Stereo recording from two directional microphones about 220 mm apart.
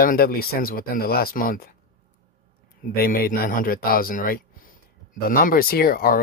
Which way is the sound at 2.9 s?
40° left (ahead or behind).